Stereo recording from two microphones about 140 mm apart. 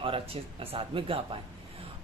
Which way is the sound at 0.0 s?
40° right (ahead or behind).